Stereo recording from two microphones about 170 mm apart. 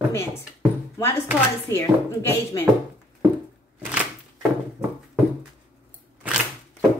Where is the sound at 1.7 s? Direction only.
15° left (ahead or behind).